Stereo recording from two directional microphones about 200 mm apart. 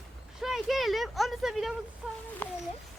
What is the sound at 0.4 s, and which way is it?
Speech, centre (ahead or behind).